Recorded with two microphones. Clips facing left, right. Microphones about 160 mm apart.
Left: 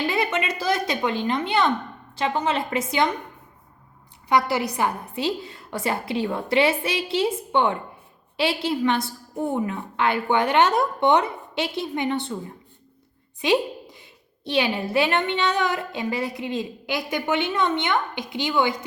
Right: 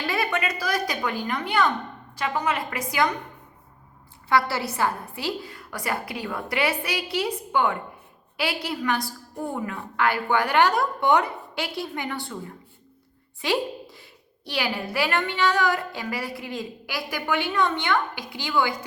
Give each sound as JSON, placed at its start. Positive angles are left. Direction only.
{"t": 0.1, "sound": "a woman's voice", "side_deg": 20}
{"t": 4.3, "sound": "a woman's voice", "side_deg": 15}
{"t": 13.4, "sound": "a woman's voice", "side_deg": 20}